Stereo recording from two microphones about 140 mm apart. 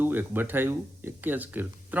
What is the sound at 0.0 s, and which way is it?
Speech, 15° right (ahead or behind).